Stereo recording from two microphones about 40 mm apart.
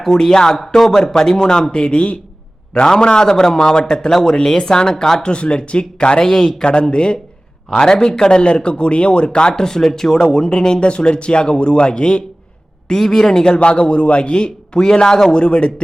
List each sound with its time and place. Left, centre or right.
0.0 s a man's voice: centre
5.3 s a man's voice: left
12.9 s a man's voice: centre